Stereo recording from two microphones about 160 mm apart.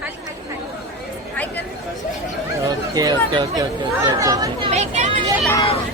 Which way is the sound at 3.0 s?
25° right (ahead or behind).